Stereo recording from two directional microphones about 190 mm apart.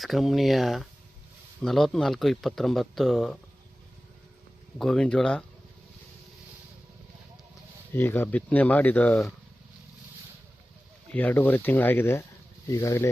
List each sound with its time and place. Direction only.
0.0 s speech: centre (ahead or behind)
4.8 s speech: 5° left (ahead or behind)
7.9 s speech: 10° left (ahead or behind)
11.1 s speech: 10° left (ahead or behind)